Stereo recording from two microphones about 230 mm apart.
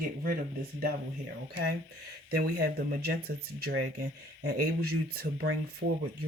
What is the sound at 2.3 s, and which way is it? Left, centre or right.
Speech, right.